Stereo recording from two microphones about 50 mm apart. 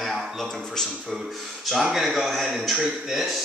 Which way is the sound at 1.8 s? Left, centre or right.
Centre.